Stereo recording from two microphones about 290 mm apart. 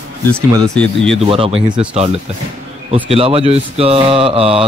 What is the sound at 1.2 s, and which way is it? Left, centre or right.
Speech, centre.